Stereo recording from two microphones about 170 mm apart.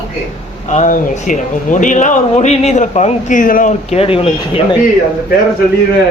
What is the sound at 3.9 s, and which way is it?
Speech, 35° left (ahead or behind).